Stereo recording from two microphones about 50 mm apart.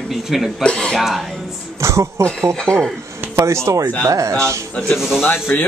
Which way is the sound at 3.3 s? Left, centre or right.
Right.